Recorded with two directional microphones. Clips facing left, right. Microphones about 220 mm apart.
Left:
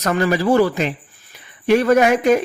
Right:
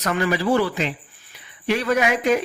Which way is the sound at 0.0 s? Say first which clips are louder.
Left 4 dB; 45° left (ahead or behind).